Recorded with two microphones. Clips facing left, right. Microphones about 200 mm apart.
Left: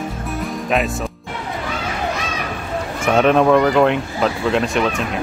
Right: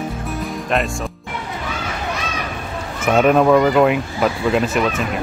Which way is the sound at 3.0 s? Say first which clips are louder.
Right 1 dB; 5° right (ahead or behind).